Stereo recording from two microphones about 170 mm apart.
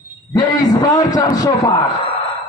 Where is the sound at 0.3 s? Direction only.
20° left (ahead or behind).